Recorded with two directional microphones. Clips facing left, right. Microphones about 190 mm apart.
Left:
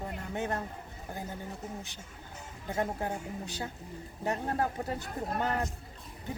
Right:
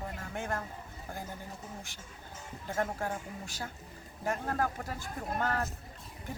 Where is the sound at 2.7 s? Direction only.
15° left (ahead or behind).